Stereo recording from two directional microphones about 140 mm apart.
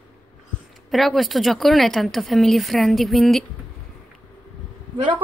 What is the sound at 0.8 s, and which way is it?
Speech, centre (ahead or behind).